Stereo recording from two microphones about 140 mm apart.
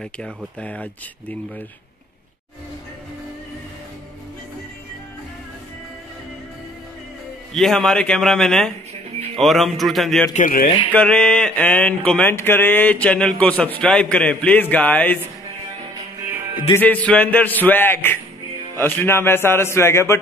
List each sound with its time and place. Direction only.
0.0 s a man's voice: 5° left (ahead or behind)
7.5 s a man's voice: 5° left (ahead or behind)
10.3 s speech: 80° left
10.9 s a man's voice: 10° left (ahead or behind)
16.7 s a man's voice: 10° left (ahead or behind)